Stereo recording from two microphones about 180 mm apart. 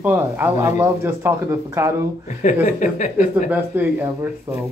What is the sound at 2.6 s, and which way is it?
Speech, 45° left (ahead or behind).